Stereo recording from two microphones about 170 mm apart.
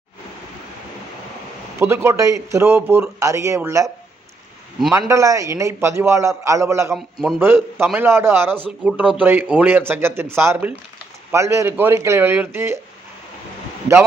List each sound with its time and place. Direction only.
1.8 s speech: 15° right (ahead or behind)
4.9 s speech: 20° right (ahead or behind)
6.9 s a man's voice: centre (ahead or behind)
7.3 s speech: 15° right (ahead or behind)